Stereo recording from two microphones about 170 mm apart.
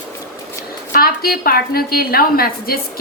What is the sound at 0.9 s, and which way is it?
A woman's voice, 60° left (ahead or behind).